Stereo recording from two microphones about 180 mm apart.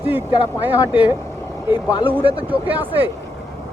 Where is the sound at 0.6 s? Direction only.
10° right (ahead or behind).